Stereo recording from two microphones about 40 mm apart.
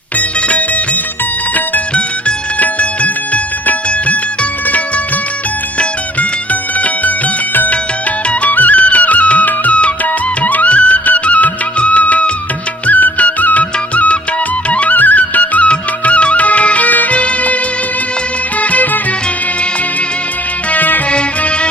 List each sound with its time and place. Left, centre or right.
0.2 s music: left
2.6 s music: left
5.8 s music: left
8.3 s music: left
15.7 s music: left
18.6 s music: left
20.7 s music: left
21.1 s music: left